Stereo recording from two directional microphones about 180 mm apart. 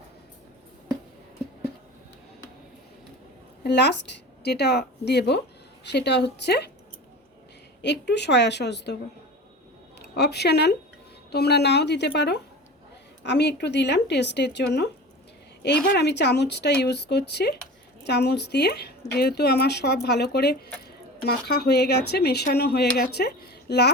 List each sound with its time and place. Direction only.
3.6 s a woman's voice: 70° left (ahead or behind)
7.8 s speech: 70° left (ahead or behind)
10.0 s a woman's voice: 65° left (ahead or behind)